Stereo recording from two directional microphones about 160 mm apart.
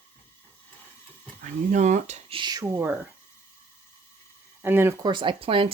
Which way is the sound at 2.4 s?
25° right (ahead or behind).